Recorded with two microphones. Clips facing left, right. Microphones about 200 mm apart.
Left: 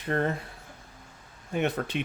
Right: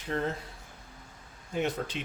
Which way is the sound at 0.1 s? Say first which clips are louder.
Left 4 dB; 60° left (ahead or behind).